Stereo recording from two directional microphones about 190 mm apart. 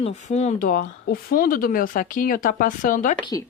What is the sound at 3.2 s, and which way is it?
Speech, 20° left (ahead or behind).